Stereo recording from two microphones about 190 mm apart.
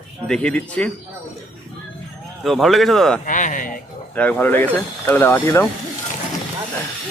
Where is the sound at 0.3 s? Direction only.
5° left (ahead or behind).